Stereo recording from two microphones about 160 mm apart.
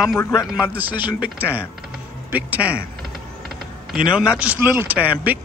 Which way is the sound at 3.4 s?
5° right (ahead or behind).